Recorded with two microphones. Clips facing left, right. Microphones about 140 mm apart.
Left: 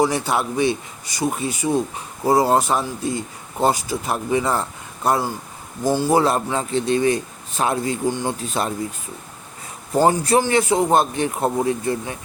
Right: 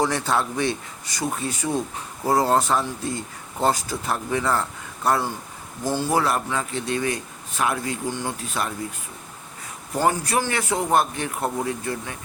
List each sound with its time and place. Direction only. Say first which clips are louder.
0.0 s speech: left 3 dB; 15° left (ahead or behind)
5.8 s a man's voice: left 5 dB; 15° left (ahead or behind)
9.9 s a man's voice: left 6 dB; 25° left (ahead or behind)